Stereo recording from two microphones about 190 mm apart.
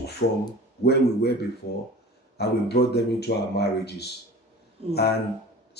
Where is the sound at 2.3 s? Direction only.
60° left (ahead or behind).